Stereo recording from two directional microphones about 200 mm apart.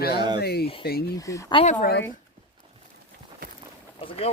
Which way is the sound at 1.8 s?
55° left (ahead or behind).